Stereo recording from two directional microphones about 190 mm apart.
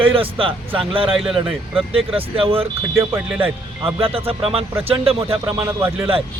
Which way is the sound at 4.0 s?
30° right (ahead or behind).